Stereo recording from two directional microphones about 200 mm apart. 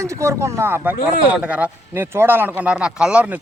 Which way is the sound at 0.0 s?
15° right (ahead or behind).